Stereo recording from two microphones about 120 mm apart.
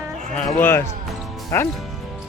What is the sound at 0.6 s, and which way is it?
Speech, 20° left (ahead or behind).